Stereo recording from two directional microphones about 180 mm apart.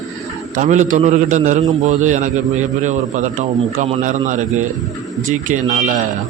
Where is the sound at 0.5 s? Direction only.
40° right (ahead or behind).